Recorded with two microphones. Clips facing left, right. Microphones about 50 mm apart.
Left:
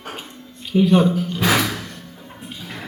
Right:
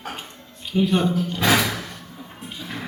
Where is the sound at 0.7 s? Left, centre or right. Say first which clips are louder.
Left 4 dB; centre.